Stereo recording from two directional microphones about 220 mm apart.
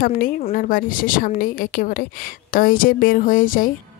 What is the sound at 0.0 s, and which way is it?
A woman's voice, 40° left (ahead or behind).